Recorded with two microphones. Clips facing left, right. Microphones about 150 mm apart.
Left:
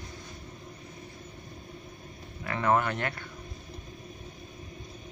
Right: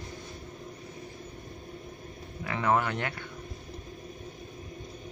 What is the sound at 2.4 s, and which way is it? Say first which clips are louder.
Speech: left 1 dB; 10° right (ahead or behind).